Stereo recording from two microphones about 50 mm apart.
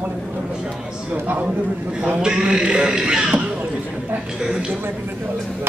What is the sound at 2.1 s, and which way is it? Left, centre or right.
Speech, centre.